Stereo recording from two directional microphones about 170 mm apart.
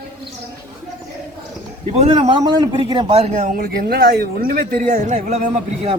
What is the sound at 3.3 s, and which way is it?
A man's voice, 50° right (ahead or behind).